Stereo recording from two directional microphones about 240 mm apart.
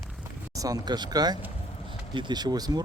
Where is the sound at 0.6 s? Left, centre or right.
Centre.